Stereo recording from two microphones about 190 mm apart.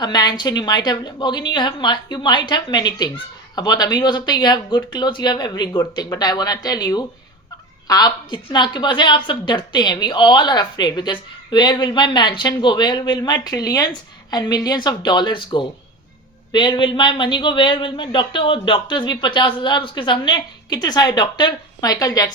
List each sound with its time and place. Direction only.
0.0 s a woman's voice: 20° left (ahead or behind)